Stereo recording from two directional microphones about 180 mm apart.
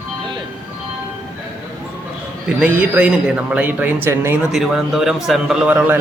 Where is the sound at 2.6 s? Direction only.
10° right (ahead or behind).